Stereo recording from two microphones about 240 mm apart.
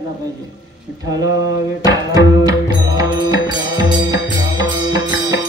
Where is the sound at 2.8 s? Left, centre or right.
Centre.